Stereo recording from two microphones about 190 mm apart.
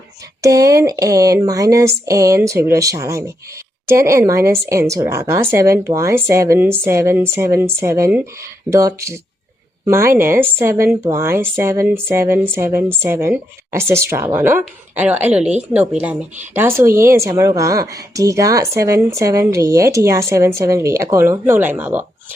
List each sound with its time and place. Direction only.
0.4 s a woman's voice: 15° right (ahead or behind)